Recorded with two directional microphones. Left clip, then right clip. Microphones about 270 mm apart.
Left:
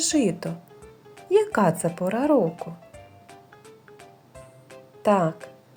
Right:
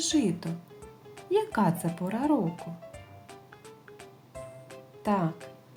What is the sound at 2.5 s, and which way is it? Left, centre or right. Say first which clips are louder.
Music: left 5 dB; centre.